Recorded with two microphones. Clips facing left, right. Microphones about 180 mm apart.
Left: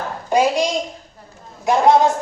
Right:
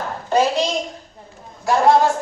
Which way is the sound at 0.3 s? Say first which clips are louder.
Left 1 dB; 10° left (ahead or behind).